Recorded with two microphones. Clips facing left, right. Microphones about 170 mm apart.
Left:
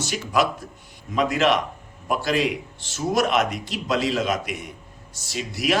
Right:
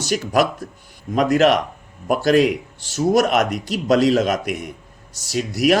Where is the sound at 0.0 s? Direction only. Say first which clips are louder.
Right 4 dB; 40° right (ahead or behind).